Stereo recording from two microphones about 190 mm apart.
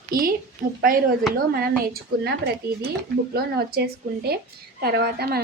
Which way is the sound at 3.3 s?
55° right (ahead or behind).